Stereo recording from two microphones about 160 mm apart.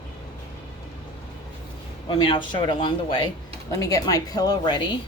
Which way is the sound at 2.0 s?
35° left (ahead or behind).